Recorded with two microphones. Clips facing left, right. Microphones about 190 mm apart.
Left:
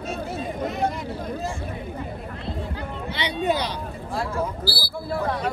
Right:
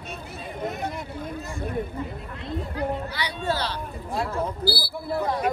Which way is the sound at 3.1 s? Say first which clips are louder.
Left 4 dB; 20° left (ahead or behind).